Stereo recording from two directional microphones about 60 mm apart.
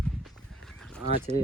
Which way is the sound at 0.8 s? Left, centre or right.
Centre.